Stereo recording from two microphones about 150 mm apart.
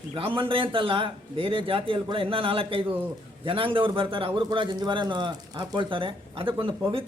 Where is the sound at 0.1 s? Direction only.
35° right (ahead or behind).